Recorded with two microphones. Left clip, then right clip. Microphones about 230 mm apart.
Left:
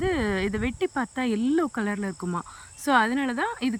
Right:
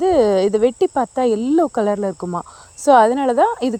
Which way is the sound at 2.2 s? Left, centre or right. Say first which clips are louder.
Right 7 dB; left.